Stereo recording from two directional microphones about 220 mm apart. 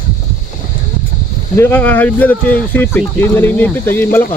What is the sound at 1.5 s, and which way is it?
Speech, 10° left (ahead or behind).